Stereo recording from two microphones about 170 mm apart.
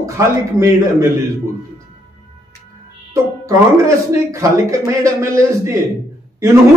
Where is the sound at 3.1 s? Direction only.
15° right (ahead or behind).